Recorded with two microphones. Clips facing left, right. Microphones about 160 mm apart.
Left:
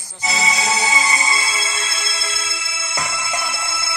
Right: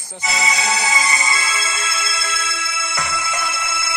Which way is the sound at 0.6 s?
25° left (ahead or behind).